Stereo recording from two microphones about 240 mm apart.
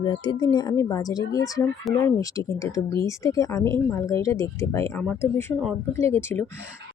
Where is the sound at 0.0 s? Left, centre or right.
Centre.